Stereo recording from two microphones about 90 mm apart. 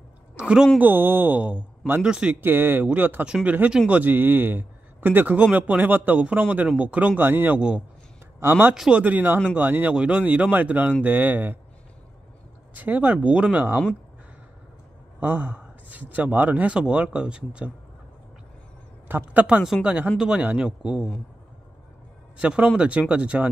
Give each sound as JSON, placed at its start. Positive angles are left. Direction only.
{"t": 0.4, "sound": "a woman's voice", "side_deg": -10}
{"t": 0.7, "sound": "a man's voice", "side_deg": -20}
{"t": 2.4, "sound": "a man's voice", "side_deg": -25}
{"t": 8.7, "sound": "speech", "side_deg": -5}
{"t": 9.0, "sound": "a man's voice", "side_deg": -20}
{"t": 12.7, "sound": "speech", "side_deg": -20}
{"t": 15.1, "sound": "speech", "side_deg": -20}
{"t": 19.0, "sound": "a man's voice", "side_deg": -20}
{"t": 22.4, "sound": "speech", "side_deg": -15}